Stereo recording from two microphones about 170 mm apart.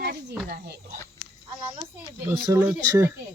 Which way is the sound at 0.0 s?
65° right (ahead or behind).